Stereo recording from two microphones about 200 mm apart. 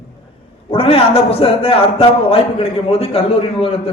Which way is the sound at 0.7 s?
30° left (ahead or behind).